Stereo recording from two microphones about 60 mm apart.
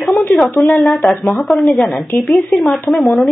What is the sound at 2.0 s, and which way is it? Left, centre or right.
Speech, left.